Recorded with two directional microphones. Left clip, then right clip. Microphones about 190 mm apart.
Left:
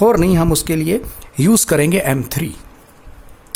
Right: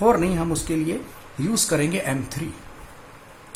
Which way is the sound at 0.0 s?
40° left (ahead or behind).